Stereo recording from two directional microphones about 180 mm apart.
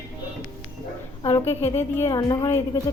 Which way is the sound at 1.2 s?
25° left (ahead or behind).